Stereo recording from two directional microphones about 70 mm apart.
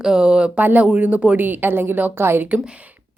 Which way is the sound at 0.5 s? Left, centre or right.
Right.